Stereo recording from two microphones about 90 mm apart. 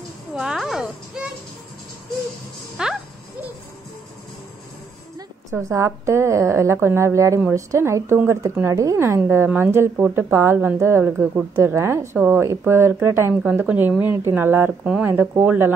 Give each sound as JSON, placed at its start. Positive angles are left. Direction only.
{"t": 0.3, "sound": "music", "side_deg": -5}
{"t": 2.8, "sound": "a sound", "side_deg": -10}
{"t": 5.5, "sound": "a woman's voice", "side_deg": -35}
{"t": 11.1, "sound": "speech", "side_deg": -20}
{"t": 11.6, "sound": "speech", "side_deg": -30}
{"t": 13.3, "sound": "speech", "side_deg": -5}
{"t": 13.7, "sound": "speech", "side_deg": -20}